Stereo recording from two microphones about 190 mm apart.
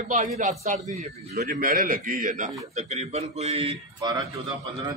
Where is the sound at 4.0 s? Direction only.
20° right (ahead or behind).